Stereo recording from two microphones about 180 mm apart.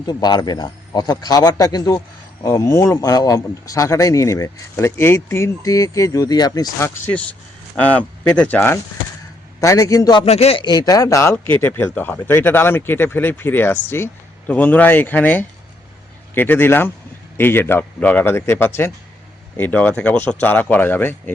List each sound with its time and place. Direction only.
0.0 s a man's voice: 20° left (ahead or behind)
10.2 s a man's voice: 35° left (ahead or behind); by 21.3 s 10° left (ahead or behind)